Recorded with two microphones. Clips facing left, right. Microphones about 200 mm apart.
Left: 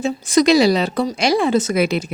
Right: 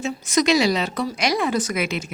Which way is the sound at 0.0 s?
35° left (ahead or behind).